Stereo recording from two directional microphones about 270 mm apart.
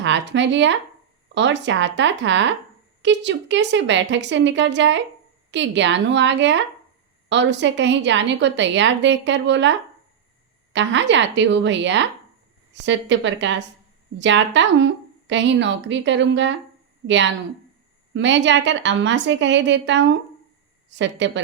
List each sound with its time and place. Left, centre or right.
0.0 s a woman's voice: right